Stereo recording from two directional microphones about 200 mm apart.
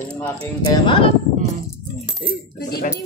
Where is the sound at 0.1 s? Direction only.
5° left (ahead or behind).